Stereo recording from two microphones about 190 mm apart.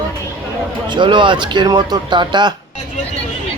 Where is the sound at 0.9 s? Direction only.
25° right (ahead or behind).